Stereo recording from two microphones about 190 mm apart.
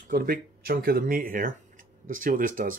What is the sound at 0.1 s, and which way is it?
Speech, 50° right (ahead or behind).